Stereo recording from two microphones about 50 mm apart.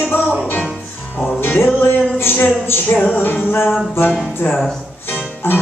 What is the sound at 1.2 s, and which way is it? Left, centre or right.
Music, left.